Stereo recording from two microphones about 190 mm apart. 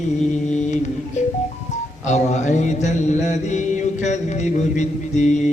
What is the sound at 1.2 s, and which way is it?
Mantra, 35° left (ahead or behind).